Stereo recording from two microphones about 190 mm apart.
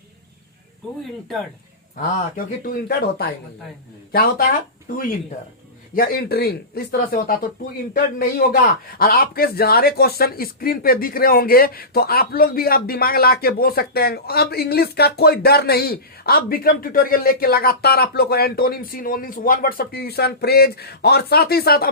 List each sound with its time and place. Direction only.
2.0 s a man's voice: 45° left (ahead or behind)
5.9 s a man's voice: 50° left (ahead or behind)